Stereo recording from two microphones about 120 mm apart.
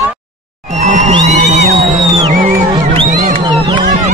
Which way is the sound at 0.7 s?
75° right (ahead or behind).